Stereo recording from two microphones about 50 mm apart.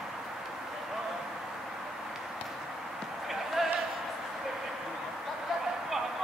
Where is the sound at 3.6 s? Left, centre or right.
Centre.